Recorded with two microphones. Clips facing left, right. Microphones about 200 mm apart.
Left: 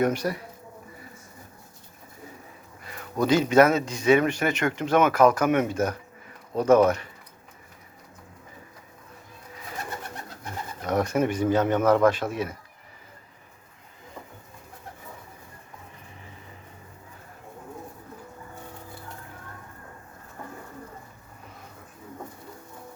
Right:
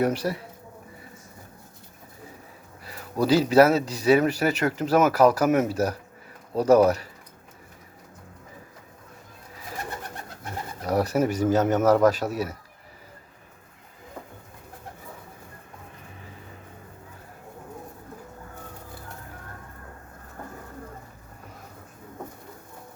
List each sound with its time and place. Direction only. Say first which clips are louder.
0.0 s speech: even; 30° right (ahead or behind)
2.8 s a sound: right 1 dB; 35° right (ahead or behind)
3.5 s speech: right 1 dB; 35° right (ahead or behind)
10.8 s speech: right 1 dB; 35° right (ahead or behind)